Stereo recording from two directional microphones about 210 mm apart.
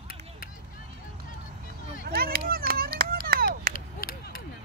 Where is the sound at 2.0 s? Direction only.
45° right (ahead or behind).